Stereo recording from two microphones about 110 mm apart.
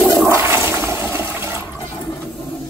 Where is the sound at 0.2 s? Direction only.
25° right (ahead or behind).